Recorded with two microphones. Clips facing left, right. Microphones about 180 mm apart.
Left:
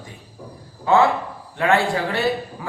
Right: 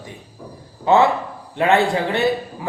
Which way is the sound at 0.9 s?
20° right (ahead or behind).